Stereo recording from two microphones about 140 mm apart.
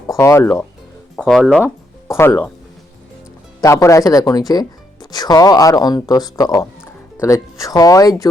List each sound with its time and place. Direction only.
0.2 s speech: 20° left (ahead or behind)
1.1 s speech: centre (ahead or behind)
1.6 s speech: 20° left (ahead or behind)
3.6 s speech: 20° left (ahead or behind)